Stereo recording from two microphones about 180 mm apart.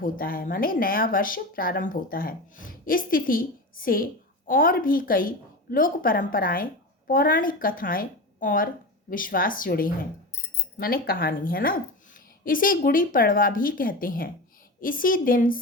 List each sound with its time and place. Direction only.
0.0 s speech: 50° left (ahead or behind)